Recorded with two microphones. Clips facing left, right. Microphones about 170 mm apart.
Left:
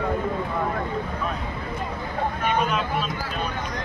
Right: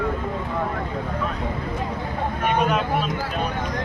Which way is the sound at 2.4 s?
55° right (ahead or behind).